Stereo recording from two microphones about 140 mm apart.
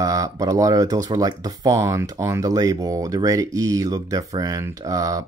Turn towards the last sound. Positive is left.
turn(degrees=-25)  # may be behind; listen again after turning